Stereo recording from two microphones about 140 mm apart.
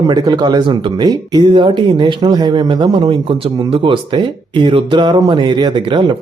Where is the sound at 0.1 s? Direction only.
30° right (ahead or behind).